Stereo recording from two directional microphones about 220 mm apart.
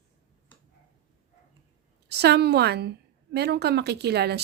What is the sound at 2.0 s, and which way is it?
Speech, 50° right (ahead or behind).